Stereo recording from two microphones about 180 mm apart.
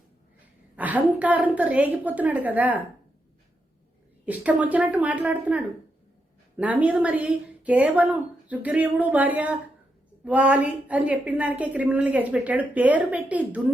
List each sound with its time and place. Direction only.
0.8 s a woman's voice: 10° right (ahead or behind)
4.3 s a woman's voice: 10° right (ahead or behind)